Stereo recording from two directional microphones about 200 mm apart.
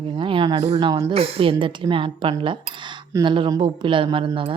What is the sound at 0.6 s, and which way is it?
A woman's voice, 35° right (ahead or behind).